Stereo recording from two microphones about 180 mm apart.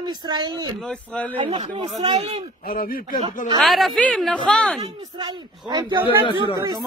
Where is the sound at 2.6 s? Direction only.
55° left (ahead or behind).